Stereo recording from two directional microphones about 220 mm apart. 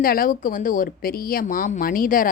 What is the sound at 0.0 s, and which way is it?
Speech, 40° left (ahead or behind).